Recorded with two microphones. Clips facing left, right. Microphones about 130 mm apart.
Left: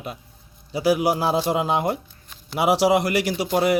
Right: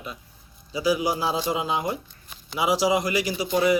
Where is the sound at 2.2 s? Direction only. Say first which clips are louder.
Left 3 dB; 5° right (ahead or behind).